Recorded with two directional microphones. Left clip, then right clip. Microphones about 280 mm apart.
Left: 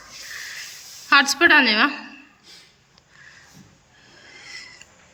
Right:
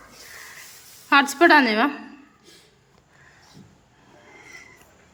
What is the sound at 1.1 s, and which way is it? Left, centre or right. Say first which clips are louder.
A woman's voice: left 1 dB; centre.